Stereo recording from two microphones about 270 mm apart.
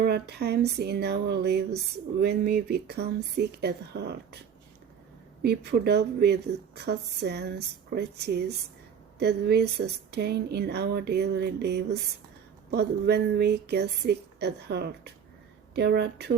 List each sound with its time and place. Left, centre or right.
0.0 s speech: right